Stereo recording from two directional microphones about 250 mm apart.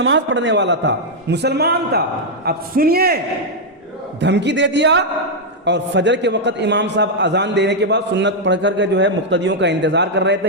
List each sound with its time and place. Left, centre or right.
0.0 s a man's voice: right
4.2 s a man's voice: right